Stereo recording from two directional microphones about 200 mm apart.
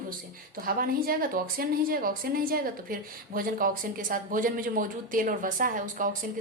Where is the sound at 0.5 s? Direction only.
45° right (ahead or behind).